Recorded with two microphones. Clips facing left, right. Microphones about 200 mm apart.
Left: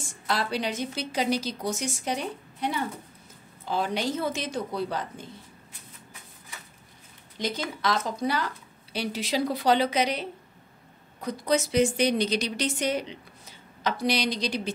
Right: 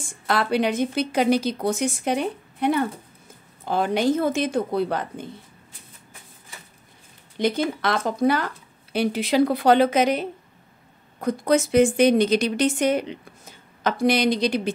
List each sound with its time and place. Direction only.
0.3 s a woman's voice: 55° right (ahead or behind)
7.3 s a woman's voice: 55° right (ahead or behind)